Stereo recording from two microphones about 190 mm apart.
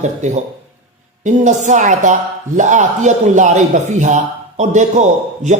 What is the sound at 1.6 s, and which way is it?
A man's voice, 40° right (ahead or behind).